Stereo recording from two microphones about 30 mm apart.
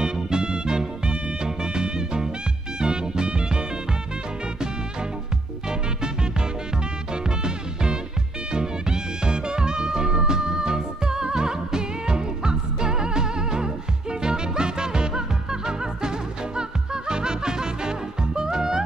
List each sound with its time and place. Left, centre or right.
0.0 s music: right
7.2 s music: right